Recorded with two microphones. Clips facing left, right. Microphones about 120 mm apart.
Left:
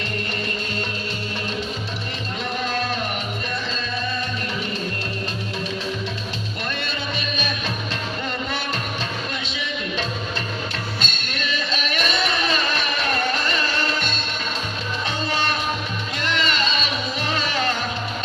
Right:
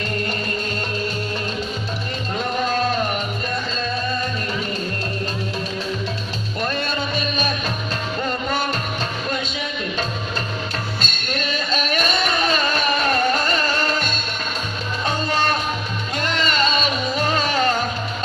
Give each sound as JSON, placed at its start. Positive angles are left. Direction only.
{"t": 6.8, "sound": "music", "side_deg": -40}
{"t": 11.3, "sound": "music", "side_deg": -40}
{"t": 15.0, "sound": "music", "side_deg": -45}